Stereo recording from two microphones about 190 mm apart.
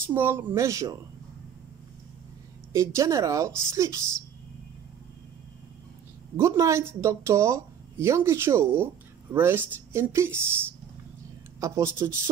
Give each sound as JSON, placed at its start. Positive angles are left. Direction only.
{"t": 0.1, "sound": "speech", "side_deg": -10}
{"t": 2.7, "sound": "speech", "side_deg": -15}
{"t": 6.3, "sound": "speech", "side_deg": -15}
{"t": 11.6, "sound": "speech", "side_deg": -15}